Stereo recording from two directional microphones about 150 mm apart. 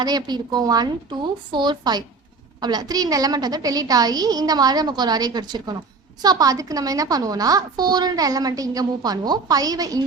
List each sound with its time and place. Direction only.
0.0 s a woman's voice: 25° right (ahead or behind)